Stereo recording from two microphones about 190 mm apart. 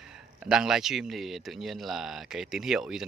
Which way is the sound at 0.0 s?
5° right (ahead or behind).